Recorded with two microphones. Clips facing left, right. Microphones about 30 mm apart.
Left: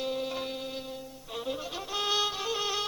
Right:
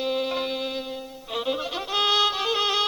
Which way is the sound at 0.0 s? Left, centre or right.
Right.